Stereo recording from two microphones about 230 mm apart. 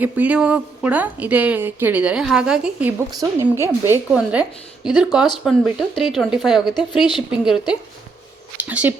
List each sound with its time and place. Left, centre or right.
0.0 s a woman's voice: centre
3.1 s a woman's voice: centre